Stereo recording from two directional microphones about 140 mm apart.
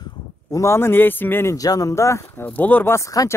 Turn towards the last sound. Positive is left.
turn(degrees=20)  # may be behind; listen again after turning